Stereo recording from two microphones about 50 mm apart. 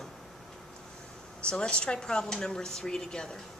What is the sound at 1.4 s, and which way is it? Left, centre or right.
Speech, left.